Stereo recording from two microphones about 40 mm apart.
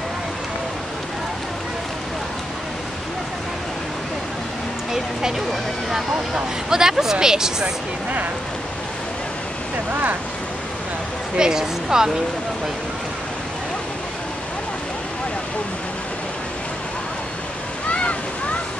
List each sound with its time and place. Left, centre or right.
5.5 s speech: centre
6.3 s speech: centre
11.3 s speech: centre